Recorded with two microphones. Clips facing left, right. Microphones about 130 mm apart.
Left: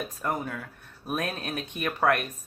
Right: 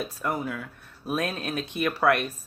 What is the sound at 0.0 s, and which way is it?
Speech, 40° left (ahead or behind).